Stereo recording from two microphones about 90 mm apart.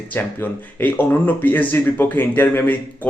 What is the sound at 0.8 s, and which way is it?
Speech, 20° left (ahead or behind).